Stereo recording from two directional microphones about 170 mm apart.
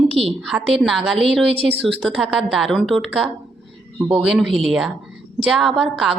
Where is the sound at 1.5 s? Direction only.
35° right (ahead or behind).